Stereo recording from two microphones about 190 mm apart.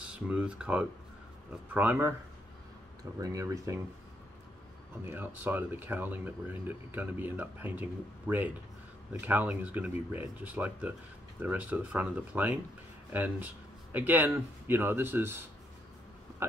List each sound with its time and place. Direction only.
0.3 s speech: 5° right (ahead or behind)
5.1 s speech: 10° right (ahead or behind)